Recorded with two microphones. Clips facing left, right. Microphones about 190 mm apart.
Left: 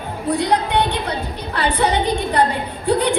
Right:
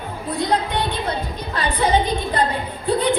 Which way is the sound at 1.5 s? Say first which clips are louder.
Even; 70° left (ahead or behind).